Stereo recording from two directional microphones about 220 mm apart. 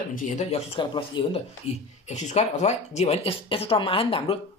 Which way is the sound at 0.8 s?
25° left (ahead or behind).